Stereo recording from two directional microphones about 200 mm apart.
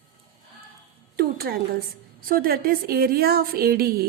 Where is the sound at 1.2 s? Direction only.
50° right (ahead or behind).